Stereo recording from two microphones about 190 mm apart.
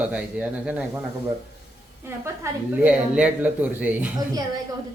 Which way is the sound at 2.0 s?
15° right (ahead or behind).